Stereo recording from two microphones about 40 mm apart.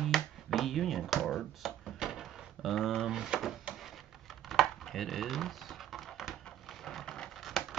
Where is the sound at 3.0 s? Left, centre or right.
Centre.